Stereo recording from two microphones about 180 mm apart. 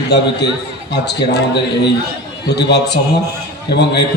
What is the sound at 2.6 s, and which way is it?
A man's voice, 65° left (ahead or behind).